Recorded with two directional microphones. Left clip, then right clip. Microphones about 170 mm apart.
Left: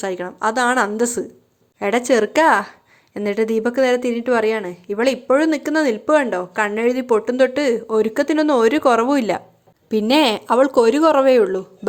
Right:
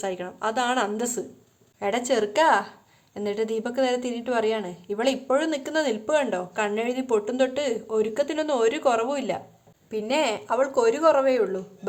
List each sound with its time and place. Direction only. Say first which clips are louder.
0.0 s a woman's voice: left 7 dB; 35° left (ahead or behind)
9.9 s a woman's voice: left 8 dB; 55° left (ahead or behind)